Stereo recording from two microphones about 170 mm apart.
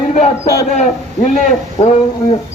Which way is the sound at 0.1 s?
45° left (ahead or behind).